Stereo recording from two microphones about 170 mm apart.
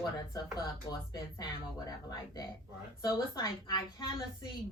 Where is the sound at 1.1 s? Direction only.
25° left (ahead or behind).